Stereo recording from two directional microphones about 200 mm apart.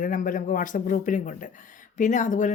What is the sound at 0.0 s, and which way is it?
Speech, 40° left (ahead or behind).